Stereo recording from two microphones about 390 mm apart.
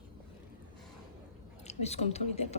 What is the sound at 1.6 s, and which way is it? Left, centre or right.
Speech, centre.